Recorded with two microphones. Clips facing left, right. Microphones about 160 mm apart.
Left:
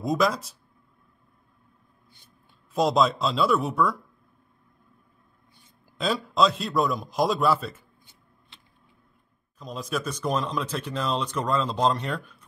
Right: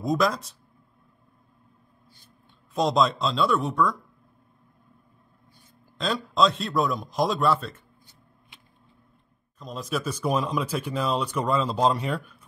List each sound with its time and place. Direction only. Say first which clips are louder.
0.0 s a man's voice: even; centre (ahead or behind)
2.7 s a man's voice: left 1 dB; centre (ahead or behind)
5.9 s a man's voice: even; 5° left (ahead or behind)
9.6 s speech: even; centre (ahead or behind)